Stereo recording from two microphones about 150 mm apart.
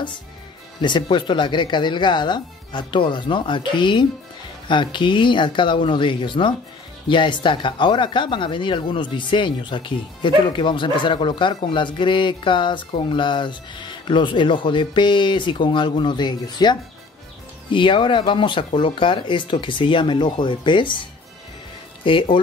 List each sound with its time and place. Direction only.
0.7 s speech: 30° left (ahead or behind)
22.0 s speech: 35° left (ahead or behind)